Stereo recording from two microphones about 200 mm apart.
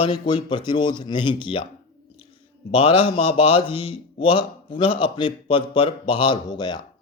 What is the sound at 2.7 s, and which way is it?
Speech, 30° left (ahead or behind).